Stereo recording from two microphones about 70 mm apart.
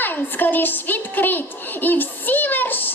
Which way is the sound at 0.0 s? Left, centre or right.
Left.